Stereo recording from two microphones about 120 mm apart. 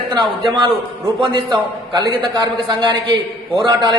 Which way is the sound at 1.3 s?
40° right (ahead or behind).